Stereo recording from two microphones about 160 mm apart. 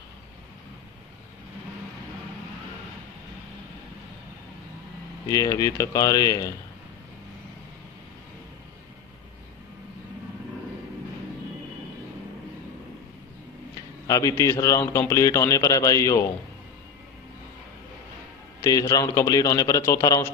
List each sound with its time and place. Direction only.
5.3 s a man's voice: 20° left (ahead or behind)
14.0 s a man's voice: 20° left (ahead or behind)
18.6 s a man's voice: 20° left (ahead or behind)